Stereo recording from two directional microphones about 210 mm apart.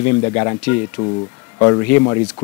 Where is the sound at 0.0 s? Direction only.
15° left (ahead or behind).